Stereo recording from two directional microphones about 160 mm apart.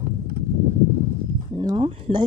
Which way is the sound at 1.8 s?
35° right (ahead or behind).